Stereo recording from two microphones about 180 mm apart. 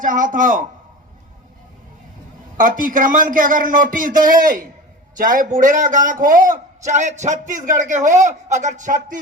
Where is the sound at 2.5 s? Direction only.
50° right (ahead or behind).